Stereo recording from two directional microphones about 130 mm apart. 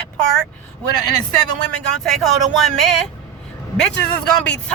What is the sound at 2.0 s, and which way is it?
Speech, centre (ahead or behind).